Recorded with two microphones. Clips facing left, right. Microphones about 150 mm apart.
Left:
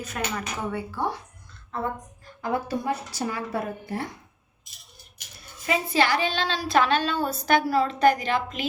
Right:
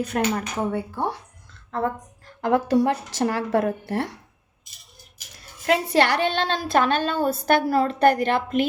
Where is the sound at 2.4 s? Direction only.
80° right.